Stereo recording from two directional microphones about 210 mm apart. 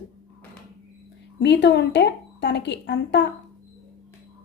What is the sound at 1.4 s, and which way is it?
Speech, 55° left (ahead or behind).